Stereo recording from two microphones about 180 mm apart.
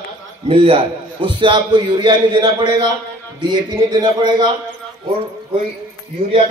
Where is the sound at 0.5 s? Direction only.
30° right (ahead or behind).